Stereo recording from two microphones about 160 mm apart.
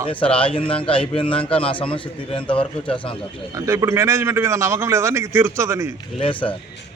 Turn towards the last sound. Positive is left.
turn(degrees=35)  # may be behind; listen again after turning